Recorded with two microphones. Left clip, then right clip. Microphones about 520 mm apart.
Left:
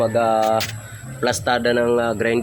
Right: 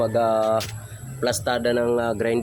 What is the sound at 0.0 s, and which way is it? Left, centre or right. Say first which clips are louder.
Speech: left 3 dB; right.